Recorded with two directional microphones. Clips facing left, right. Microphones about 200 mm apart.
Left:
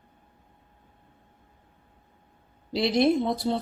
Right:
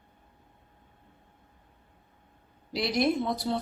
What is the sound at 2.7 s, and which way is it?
Speech, 25° left (ahead or behind).